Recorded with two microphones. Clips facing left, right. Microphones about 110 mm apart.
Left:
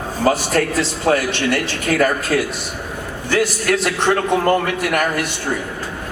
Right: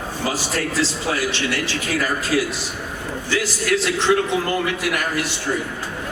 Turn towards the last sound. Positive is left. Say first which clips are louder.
# left 4 dB
turn(degrees=55)  # may be behind; listen again after turning